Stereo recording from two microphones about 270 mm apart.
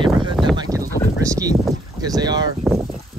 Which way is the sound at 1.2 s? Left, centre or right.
Centre.